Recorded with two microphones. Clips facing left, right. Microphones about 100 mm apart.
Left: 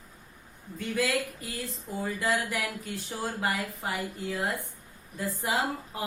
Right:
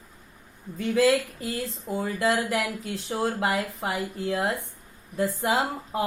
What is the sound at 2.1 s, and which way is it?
Speech, 90° right.